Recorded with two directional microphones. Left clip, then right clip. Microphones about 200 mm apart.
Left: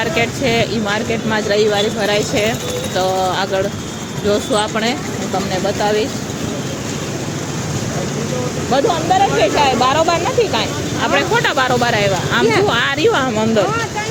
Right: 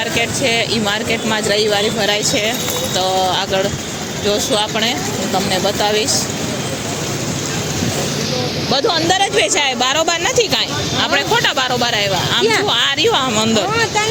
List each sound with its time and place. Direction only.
0.2 s speech: 15° left (ahead or behind)
5.6 s speech: 5° left (ahead or behind)
9.4 s speech: 15° right (ahead or behind)
11.1 s speech: centre (ahead or behind)